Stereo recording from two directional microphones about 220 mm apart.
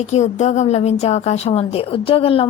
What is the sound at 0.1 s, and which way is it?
Speech, 30° left (ahead or behind).